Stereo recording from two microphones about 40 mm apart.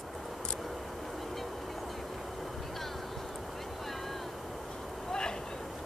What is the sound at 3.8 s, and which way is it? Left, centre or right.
Vehicle, centre.